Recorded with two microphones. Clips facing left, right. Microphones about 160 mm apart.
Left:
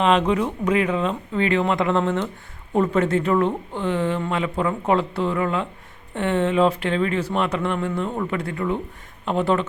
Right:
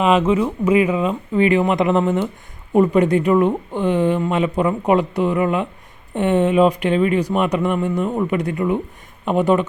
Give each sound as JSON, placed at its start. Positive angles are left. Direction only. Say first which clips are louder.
{"t": 0.0, "sound": "speech", "louder": "right 3 dB", "side_deg": -5}